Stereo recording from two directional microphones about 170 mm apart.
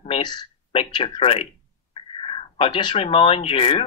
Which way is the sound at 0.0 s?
30° left (ahead or behind).